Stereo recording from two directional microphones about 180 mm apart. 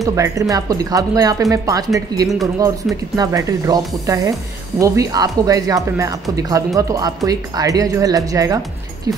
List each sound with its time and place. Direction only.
0.0 s speech: 15° right (ahead or behind)